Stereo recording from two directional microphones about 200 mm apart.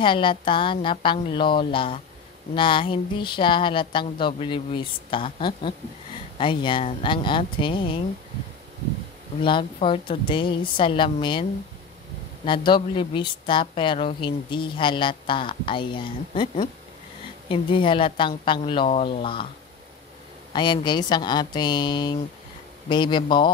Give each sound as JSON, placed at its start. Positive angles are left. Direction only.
{"t": 0.0, "sound": "speech", "side_deg": 25}
{"t": 9.4, "sound": "speech", "side_deg": 25}
{"t": 12.4, "sound": "speech", "side_deg": 25}
{"t": 20.5, "sound": "speech", "side_deg": 20}